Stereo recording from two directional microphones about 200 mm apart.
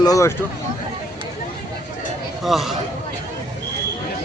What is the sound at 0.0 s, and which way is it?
Speech, 15° left (ahead or behind).